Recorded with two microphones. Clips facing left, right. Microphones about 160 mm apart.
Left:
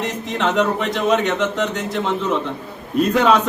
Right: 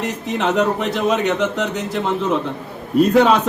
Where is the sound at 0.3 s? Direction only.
5° right (ahead or behind).